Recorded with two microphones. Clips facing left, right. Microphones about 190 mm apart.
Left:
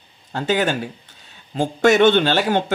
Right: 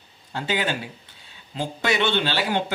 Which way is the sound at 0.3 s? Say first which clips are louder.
Left 6 dB; 45° left (ahead or behind).